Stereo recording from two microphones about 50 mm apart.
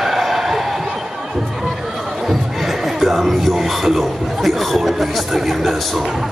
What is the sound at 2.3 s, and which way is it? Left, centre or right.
Music, centre.